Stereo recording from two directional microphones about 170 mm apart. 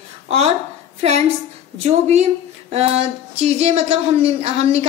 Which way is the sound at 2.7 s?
40° right (ahead or behind).